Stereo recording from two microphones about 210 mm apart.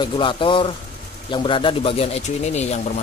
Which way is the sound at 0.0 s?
25° left (ahead or behind).